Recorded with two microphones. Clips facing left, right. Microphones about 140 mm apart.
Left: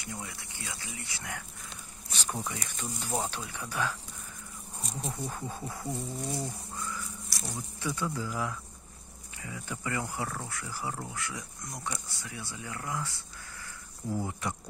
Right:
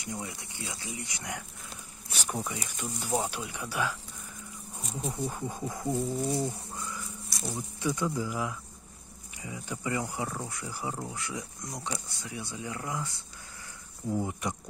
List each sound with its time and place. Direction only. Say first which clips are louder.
0.0 s speech: right 3 dB; 20° right (ahead or behind)
1.7 s a sound: right 1 dB; 10° right (ahead or behind)
2.8 s speech: right 3 dB; 10° right (ahead or behind)
5.1 s speech: right 3 dB; 15° right (ahead or behind)
7.2 s insect: right 7 dB; centre (ahead or behind)
7.5 s speech: right 4 dB; 20° right (ahead or behind)